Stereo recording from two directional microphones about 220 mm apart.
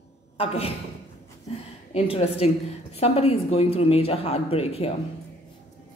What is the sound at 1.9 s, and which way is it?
Speech, 25° left (ahead or behind).